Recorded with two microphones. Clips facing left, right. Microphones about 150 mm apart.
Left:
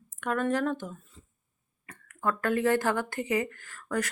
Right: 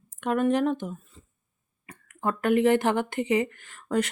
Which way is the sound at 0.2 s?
20° right (ahead or behind).